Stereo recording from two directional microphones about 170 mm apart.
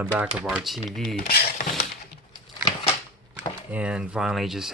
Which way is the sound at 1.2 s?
65° left (ahead or behind).